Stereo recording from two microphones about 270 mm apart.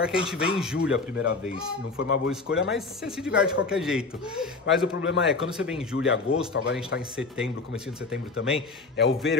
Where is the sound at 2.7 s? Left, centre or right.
Centre.